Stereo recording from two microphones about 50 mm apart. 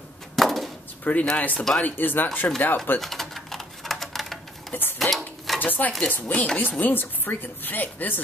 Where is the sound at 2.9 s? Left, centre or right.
Centre.